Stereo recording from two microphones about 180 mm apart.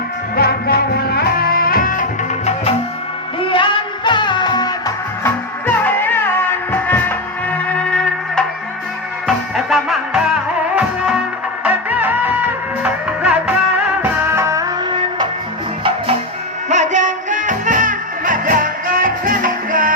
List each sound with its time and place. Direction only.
0.3 s music: 60° left (ahead or behind)
3.4 s music: 30° left (ahead or behind)
5.2 s music: 10° left (ahead or behind)
11.6 s music: 10° right (ahead or behind)
16.6 s music: 40° right (ahead or behind)